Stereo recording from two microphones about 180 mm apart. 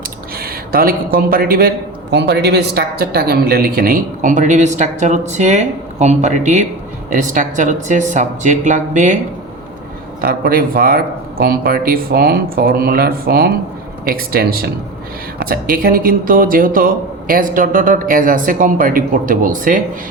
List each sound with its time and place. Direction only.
0.3 s a man's voice: 55° right (ahead or behind)
10.2 s a man's voice: 55° right (ahead or behind)